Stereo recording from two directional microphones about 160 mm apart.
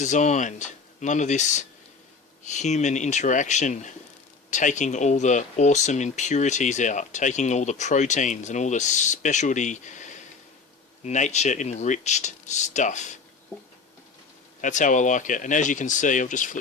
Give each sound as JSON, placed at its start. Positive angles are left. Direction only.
{"t": 0.0, "sound": "speech", "side_deg": 50}
{"t": 14.6, "sound": "speech", "side_deg": 50}